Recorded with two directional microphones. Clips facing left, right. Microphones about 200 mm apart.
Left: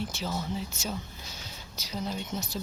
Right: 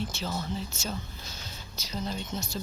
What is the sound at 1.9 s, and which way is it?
Speech, 10° left (ahead or behind).